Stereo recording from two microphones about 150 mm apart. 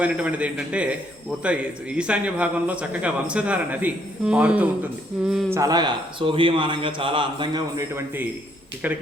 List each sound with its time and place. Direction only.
0.0 s a man's voice: 10° right (ahead or behind)
5.5 s a man's voice: 20° right (ahead or behind)
7.9 s a man's voice: 15° right (ahead or behind)